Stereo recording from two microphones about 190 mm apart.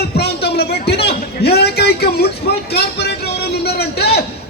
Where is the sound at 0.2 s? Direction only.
60° left (ahead or behind).